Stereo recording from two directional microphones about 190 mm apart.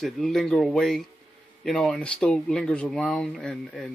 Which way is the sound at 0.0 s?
Centre (ahead or behind).